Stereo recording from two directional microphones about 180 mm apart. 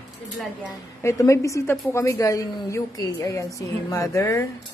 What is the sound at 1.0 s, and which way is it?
A woman's voice, 15° left (ahead or behind).